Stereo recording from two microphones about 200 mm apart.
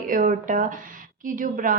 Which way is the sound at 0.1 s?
40° right (ahead or behind).